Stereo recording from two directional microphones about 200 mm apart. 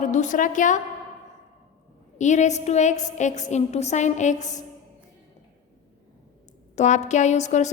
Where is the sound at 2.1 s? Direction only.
35° left (ahead or behind).